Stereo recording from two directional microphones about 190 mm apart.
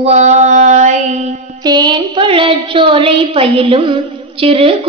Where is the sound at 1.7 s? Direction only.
20° right (ahead or behind).